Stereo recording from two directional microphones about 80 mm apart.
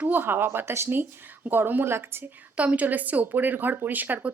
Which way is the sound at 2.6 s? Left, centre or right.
Centre.